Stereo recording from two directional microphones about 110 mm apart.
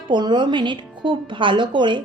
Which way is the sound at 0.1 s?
45° right (ahead or behind).